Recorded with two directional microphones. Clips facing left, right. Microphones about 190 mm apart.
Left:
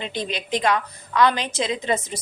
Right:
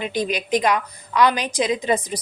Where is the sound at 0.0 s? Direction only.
25° left (ahead or behind).